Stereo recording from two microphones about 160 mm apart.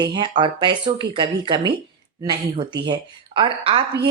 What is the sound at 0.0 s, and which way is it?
A woman's voice, 25° right (ahead or behind).